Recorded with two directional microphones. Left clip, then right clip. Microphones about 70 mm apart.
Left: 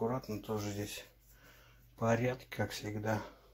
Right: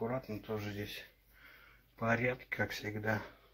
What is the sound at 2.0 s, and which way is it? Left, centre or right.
Speech, left.